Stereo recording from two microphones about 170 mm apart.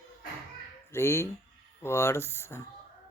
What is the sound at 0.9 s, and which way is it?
Speech, 15° left (ahead or behind).